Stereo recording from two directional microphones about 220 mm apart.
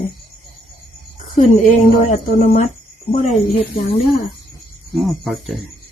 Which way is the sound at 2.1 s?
35° left (ahead or behind).